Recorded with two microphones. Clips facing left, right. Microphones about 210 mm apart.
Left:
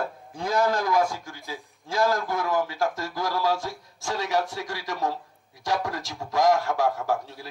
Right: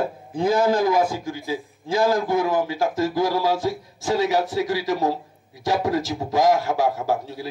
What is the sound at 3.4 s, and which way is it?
A man's voice, centre (ahead or behind).